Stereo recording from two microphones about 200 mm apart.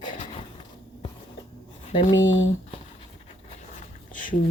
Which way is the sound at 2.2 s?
70° left (ahead or behind).